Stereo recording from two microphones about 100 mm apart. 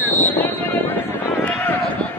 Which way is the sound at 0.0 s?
20° left (ahead or behind).